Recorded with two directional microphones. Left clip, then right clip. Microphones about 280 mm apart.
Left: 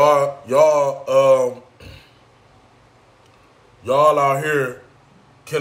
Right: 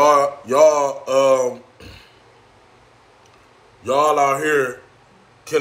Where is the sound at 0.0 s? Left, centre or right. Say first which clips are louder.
Right 1 dB; centre.